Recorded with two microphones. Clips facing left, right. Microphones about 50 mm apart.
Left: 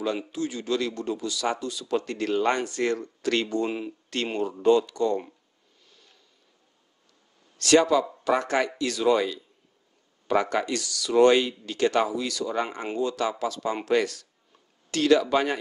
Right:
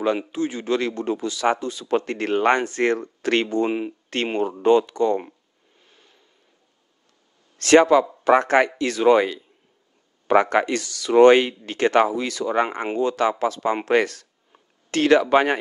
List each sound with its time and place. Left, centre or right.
0.0 s a man's voice: right
5.9 s vehicle: right
7.5 s a man's voice: right
14.5 s a sound: right